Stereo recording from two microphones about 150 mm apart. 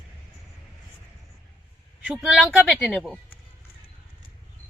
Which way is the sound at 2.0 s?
5° right (ahead or behind).